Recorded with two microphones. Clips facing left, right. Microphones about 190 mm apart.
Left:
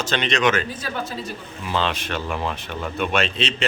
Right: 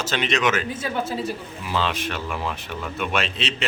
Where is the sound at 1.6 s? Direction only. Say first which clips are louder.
Left 1 dB; 5° right (ahead or behind).